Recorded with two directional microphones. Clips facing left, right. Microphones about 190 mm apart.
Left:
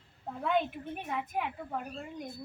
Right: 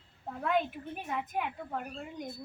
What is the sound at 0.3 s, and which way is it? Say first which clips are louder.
Speech: even; centre (ahead or behind).